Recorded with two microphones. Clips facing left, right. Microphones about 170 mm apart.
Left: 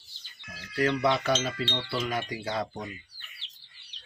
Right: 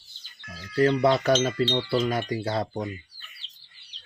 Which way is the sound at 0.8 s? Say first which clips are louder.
Right 5 dB; 35° right (ahead or behind).